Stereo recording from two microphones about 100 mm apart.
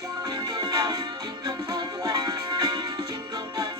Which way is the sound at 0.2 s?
35° right (ahead or behind).